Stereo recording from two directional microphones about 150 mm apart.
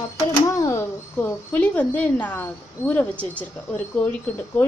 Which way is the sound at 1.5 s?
10° left (ahead or behind).